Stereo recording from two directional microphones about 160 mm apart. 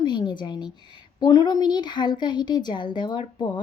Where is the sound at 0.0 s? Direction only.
25° left (ahead or behind).